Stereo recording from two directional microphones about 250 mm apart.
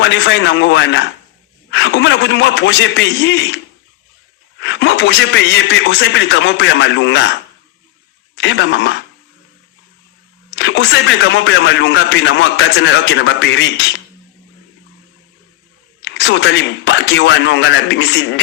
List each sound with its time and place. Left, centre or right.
0.0 s a man's voice: left
8.4 s a man's voice: left
10.5 s a man's voice: left
16.0 s a man's voice: left